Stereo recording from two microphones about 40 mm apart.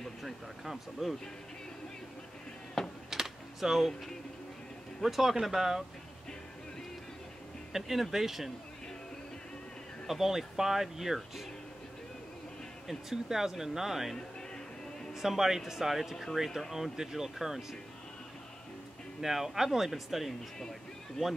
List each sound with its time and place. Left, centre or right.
0.2 s speech: centre
2.8 s a sound: centre
3.1 s a sound: centre
5.0 s speech: centre
7.7 s speech: centre
10.0 s speech: centre
12.8 s speech: centre
15.1 s speech: centre
19.2 s speech: centre
21.2 s speech: centre